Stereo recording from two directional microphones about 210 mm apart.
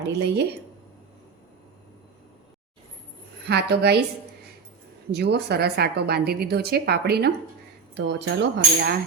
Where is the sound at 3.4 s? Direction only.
50° right (ahead or behind).